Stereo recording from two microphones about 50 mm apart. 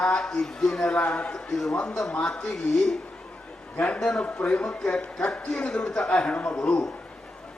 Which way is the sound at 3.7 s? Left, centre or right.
Left.